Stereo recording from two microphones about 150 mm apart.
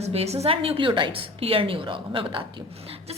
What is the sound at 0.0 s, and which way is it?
A woman's voice, 45° right (ahead or behind).